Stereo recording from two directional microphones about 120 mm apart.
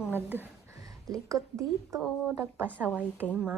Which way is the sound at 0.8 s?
30° right (ahead or behind).